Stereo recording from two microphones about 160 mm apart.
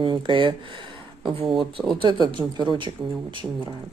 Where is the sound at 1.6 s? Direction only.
30° right (ahead or behind).